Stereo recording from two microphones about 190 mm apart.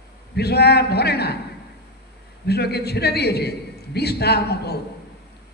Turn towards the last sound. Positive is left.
turn(degrees=60)  # may be behind; listen again after turning